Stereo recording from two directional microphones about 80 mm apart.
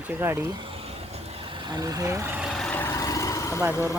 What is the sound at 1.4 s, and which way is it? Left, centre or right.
Vehicle, right.